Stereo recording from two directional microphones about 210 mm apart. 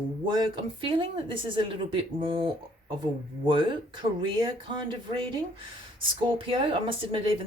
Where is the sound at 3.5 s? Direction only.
25° right (ahead or behind).